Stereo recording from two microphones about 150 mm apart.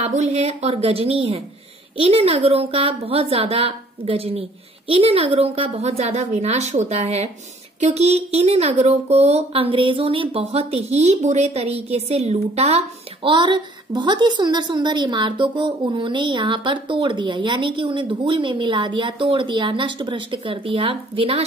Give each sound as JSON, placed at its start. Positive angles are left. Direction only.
{"t": 0.0, "sound": "a woman's voice", "side_deg": -50}